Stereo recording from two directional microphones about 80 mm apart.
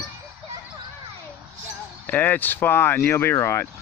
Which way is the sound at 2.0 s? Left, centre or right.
Left.